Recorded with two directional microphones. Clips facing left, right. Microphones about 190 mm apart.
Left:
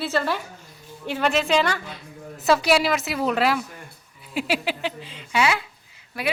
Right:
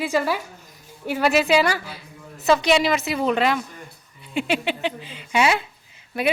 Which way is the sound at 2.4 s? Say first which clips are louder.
Right 1 dB; 5° left (ahead or behind).